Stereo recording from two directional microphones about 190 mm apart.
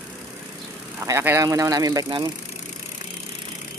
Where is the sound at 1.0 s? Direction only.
15° right (ahead or behind).